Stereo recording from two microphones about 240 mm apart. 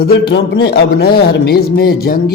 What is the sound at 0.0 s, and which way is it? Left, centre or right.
A man's voice, left.